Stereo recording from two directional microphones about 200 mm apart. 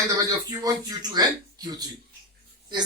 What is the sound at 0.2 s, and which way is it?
Speech, 15° right (ahead or behind).